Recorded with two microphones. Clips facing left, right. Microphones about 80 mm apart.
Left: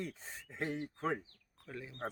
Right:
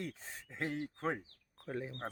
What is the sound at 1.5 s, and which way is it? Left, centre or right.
Speech, right.